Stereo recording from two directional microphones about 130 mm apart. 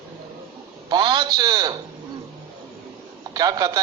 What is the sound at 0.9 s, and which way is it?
Speech, 35° right (ahead or behind).